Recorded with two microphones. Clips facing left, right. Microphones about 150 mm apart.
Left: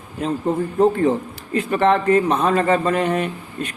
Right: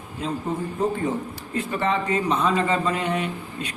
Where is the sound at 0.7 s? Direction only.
70° left (ahead or behind).